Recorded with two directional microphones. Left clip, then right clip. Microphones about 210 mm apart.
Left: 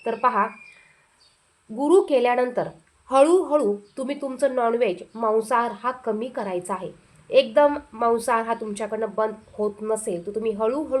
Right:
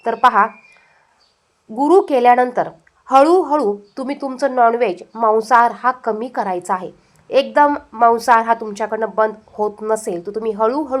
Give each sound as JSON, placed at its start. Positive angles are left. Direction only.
{"t": 0.0, "sound": "a woman's voice", "side_deg": -15}
{"t": 1.7, "sound": "a woman's voice", "side_deg": -15}